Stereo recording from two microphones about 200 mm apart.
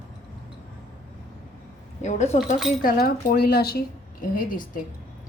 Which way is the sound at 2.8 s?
45° left (ahead or behind).